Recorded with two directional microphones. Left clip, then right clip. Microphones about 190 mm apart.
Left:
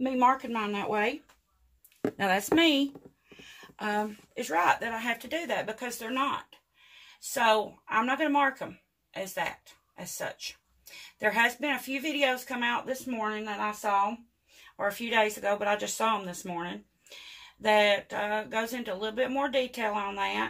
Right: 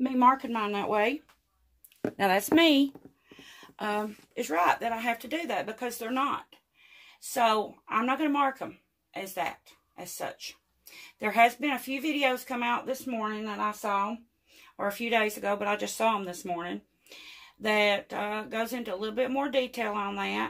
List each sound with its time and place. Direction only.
0.0 s speech: 40° right (ahead or behind)
2.1 s speech: 40° right (ahead or behind)
7.9 s speech: 35° right (ahead or behind)
9.9 s speech: 35° right (ahead or behind)